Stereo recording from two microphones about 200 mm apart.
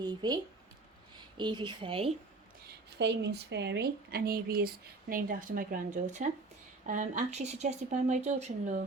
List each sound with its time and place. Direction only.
0.0 s a woman's voice: 20° right (ahead or behind)
1.4 s a woman's voice: 20° right (ahead or behind)
3.0 s speech: 60° right (ahead or behind); by 8.8 s 35° right (ahead or behind)